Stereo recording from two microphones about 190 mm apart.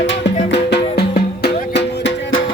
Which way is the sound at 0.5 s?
60° left (ahead or behind).